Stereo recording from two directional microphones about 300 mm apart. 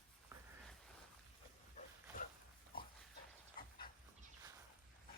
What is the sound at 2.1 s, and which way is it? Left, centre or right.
Pig, left.